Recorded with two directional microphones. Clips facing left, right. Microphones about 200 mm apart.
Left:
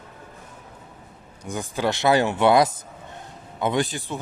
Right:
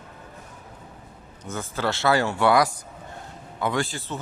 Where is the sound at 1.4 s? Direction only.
15° left (ahead or behind).